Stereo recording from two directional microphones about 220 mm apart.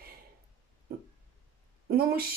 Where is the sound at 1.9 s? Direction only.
45° right (ahead or behind).